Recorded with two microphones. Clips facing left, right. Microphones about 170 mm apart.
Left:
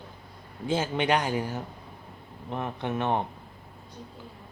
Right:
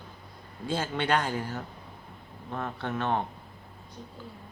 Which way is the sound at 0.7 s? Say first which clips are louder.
Left 2 dB; 20° left (ahead or behind).